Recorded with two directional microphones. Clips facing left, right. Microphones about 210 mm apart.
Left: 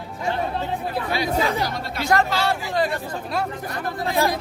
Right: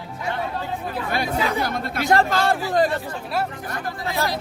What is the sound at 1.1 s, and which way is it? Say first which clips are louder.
Speech: left 1 dB; 55° right (ahead or behind).